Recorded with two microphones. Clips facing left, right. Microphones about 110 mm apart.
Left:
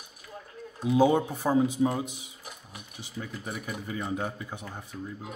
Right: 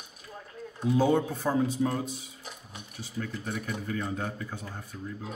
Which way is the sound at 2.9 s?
15° left (ahead or behind).